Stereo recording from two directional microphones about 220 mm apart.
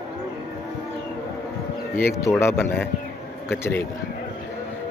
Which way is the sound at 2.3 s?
10° left (ahead or behind).